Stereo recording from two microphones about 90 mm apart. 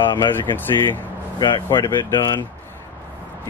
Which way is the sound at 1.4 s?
60° left (ahead or behind).